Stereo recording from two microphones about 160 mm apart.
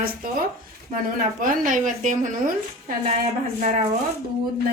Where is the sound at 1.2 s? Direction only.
55° right (ahead or behind).